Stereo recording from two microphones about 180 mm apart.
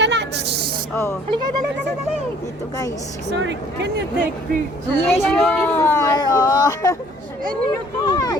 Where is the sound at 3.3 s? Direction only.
75° right (ahead or behind).